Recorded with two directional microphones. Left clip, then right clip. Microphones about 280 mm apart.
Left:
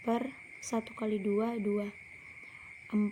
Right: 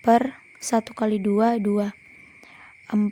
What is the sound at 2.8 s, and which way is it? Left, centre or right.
Whispering, right.